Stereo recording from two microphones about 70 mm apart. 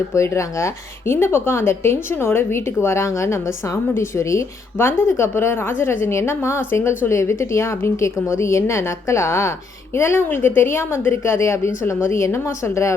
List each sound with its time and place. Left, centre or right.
0.1 s a woman's voice: left